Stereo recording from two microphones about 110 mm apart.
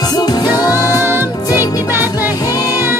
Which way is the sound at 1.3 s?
30° left (ahead or behind).